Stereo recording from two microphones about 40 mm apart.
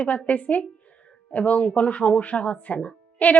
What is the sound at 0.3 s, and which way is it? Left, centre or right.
A woman's voice, left.